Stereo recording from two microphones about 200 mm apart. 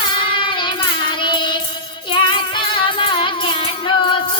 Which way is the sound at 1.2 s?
25° left (ahead or behind).